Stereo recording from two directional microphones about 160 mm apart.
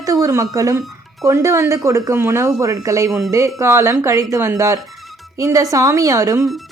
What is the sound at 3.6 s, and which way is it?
Speech, 20° right (ahead or behind).